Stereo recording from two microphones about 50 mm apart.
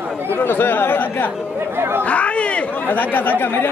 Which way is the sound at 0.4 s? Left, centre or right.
Left.